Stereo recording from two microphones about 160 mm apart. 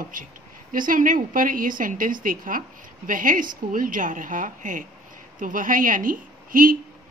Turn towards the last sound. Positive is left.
turn(degrees=-60)  # may be behind; listen again after turning